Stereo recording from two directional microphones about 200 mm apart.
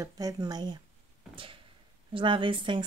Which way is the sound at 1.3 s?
25° right (ahead or behind).